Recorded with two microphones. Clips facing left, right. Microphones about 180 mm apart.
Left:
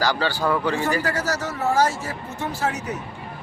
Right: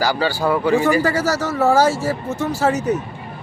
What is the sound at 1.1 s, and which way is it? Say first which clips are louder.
Speech: right 6 dB; 90° right.